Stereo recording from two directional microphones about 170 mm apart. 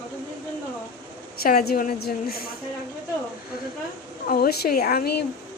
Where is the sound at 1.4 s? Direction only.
65° left (ahead or behind).